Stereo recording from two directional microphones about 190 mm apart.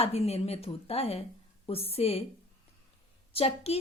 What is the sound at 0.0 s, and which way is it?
A woman's voice, 30° left (ahead or behind).